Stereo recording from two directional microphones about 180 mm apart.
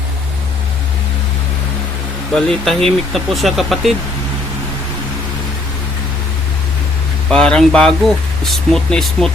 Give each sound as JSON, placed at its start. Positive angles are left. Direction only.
{"t": 2.3, "sound": "speech", "side_deg": 0}
{"t": 7.3, "sound": "speech", "side_deg": 5}